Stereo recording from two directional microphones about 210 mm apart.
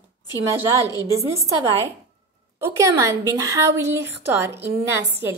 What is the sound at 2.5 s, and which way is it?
A woman's voice, 15° right (ahead or behind).